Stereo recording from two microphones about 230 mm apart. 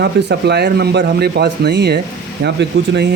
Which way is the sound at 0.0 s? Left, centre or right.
Right.